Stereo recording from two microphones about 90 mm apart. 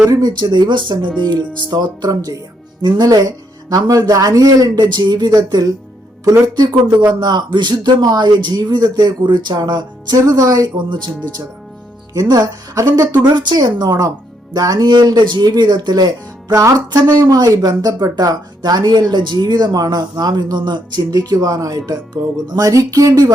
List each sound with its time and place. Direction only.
0.1 s speech: 50° right (ahead or behind)
10.8 s speech: 60° right (ahead or behind)
12.1 s speech: 45° right (ahead or behind)